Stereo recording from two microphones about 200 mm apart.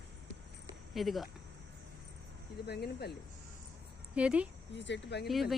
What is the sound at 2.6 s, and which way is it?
Speech, 55° left (ahead or behind).